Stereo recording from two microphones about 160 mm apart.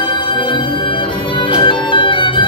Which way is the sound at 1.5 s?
30° left (ahead or behind).